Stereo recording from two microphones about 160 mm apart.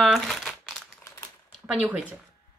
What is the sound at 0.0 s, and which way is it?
Crumpling, centre (ahead or behind).